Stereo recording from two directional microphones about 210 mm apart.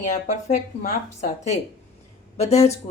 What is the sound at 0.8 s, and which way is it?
Speech, 35° left (ahead or behind).